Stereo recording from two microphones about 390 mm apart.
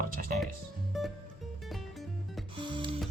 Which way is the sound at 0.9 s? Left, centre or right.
Centre.